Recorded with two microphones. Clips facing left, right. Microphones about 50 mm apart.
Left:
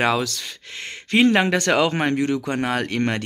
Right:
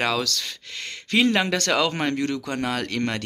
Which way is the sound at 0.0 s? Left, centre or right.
Left.